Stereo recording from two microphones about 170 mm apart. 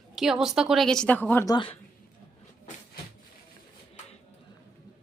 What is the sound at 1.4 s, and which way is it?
Speech, 25° left (ahead or behind).